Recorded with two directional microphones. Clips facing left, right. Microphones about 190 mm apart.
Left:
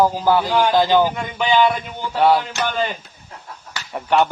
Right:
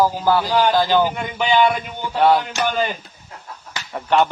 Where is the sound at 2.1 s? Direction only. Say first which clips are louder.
Even; 5° left (ahead or behind).